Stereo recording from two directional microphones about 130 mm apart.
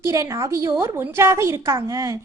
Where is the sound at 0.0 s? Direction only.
25° right (ahead or behind).